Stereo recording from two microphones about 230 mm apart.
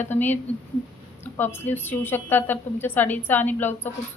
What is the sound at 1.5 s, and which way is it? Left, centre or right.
A woman's voice, centre.